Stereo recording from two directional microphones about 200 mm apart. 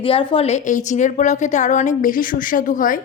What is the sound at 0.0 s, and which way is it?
A woman's voice, 25° left (ahead or behind).